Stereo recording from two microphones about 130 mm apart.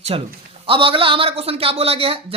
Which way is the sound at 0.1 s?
45° right (ahead or behind).